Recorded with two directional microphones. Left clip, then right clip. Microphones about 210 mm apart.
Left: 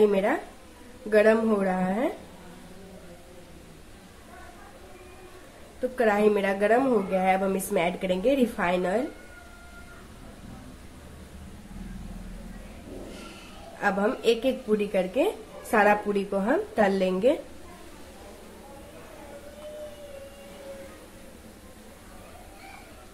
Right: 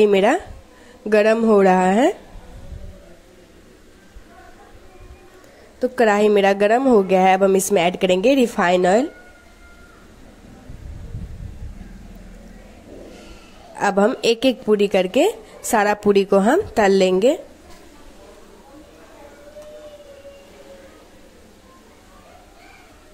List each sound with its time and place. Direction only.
0.0 s speech: 40° right (ahead or behind)
5.9 s speech: 40° right (ahead or behind)
13.7 s speech: 35° right (ahead or behind)